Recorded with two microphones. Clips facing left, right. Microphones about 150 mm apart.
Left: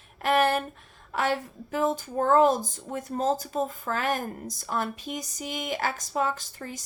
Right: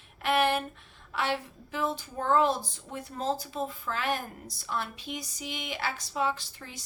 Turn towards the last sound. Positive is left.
turn(degrees=45)  # may be behind; listen again after turning